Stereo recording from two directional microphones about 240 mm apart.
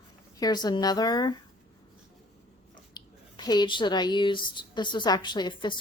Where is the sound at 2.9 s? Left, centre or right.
Centre.